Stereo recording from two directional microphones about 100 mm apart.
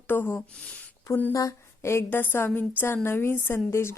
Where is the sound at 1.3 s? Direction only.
35° left (ahead or behind).